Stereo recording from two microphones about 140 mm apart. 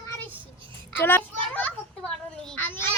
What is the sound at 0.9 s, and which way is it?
Children playing, 15° left (ahead or behind).